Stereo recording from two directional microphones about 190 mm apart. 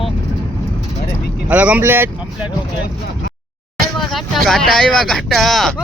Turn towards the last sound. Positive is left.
turn(degrees=0)  # may be behind; listen again after turning